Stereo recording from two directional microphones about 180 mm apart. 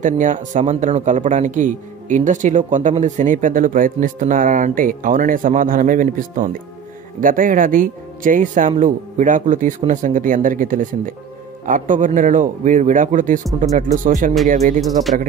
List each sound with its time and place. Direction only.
0.0 s a man's voice: 45° right (ahead or behind)
14.8 s speech: centre (ahead or behind)